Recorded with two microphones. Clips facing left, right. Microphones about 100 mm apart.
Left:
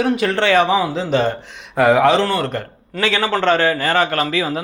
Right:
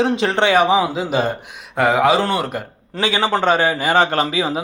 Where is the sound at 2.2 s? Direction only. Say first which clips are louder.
Left 1 dB; 15° right (ahead or behind).